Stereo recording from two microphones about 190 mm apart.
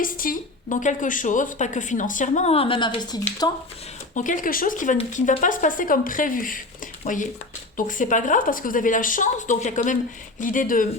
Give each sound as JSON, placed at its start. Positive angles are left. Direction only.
{"t": 0.0, "sound": "a woman's voice", "side_deg": 45}
{"t": 4.1, "sound": "speech", "side_deg": 40}